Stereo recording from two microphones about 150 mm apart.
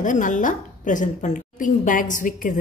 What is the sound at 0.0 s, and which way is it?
A woman's voice, 60° left (ahead or behind).